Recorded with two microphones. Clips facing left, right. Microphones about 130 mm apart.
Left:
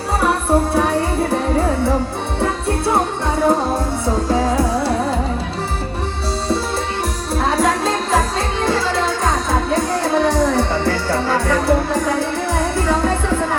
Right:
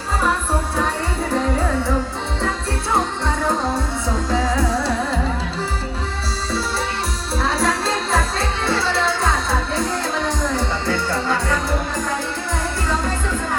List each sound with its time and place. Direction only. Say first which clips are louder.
0.2 s music: left 6 dB; 65° left (ahead or behind)
2.4 s music: left 7 dB; 60° left (ahead or behind)
7.4 s music: left 4 dB; 50° left (ahead or behind)
12.5 s music: left 5 dB; 60° left (ahead or behind)